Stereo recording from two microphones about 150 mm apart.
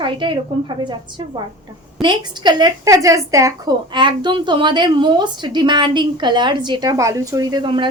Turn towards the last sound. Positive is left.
turn(degrees=-30)  # may be behind; listen again after turning